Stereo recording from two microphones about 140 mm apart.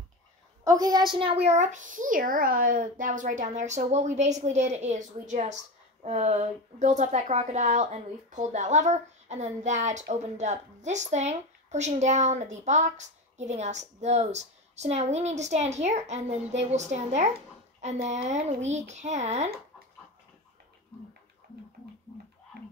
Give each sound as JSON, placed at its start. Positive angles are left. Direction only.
{"t": 0.7, "sound": "a woman's voice", "side_deg": -25}
{"t": 1.1, "sound": "a woman's voice", "side_deg": -40}